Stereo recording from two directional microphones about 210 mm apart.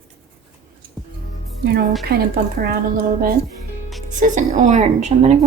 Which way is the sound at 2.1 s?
50° right (ahead or behind).